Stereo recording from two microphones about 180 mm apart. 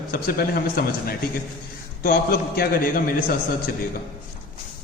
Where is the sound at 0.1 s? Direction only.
55° left (ahead or behind).